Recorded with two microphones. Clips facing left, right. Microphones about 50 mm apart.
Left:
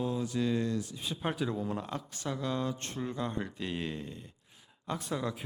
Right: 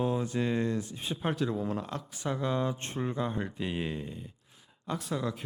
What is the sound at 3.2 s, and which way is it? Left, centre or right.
Speech, centre.